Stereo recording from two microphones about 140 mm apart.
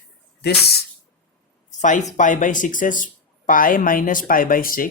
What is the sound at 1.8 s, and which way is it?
Speech, 60° left (ahead or behind).